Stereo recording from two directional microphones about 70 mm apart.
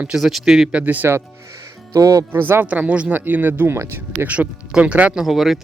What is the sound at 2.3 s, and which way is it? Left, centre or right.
Speech, right.